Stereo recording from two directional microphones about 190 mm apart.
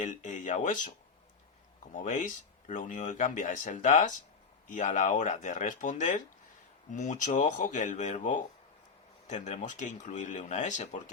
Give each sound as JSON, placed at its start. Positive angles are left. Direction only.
{"t": 0.0, "sound": "speech", "side_deg": 40}
{"t": 1.9, "sound": "speech", "side_deg": 40}